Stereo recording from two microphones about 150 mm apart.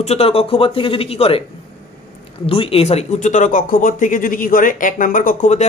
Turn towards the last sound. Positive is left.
turn(degrees=60)  # may be behind; listen again after turning